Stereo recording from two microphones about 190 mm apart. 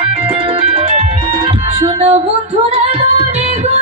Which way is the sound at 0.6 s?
30° right (ahead or behind).